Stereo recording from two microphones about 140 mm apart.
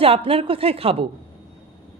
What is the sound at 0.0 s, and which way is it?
A woman's voice, 40° right (ahead or behind).